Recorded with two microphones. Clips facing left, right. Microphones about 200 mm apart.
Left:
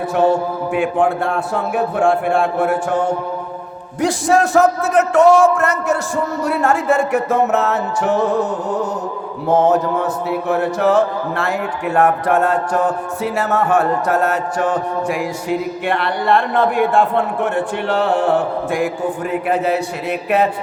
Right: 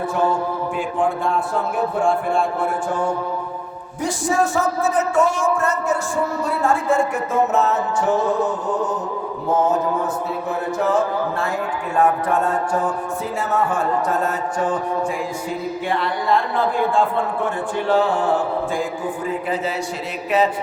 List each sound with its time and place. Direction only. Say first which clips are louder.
0.1 s music: left 7 dB; 70° left (ahead or behind)
4.0 s music: left 5 dB; 80° left
10.5 s music: left 5 dB; 75° left (ahead or behind)
19.3 s a man's voice: left 7 dB; 65° left (ahead or behind)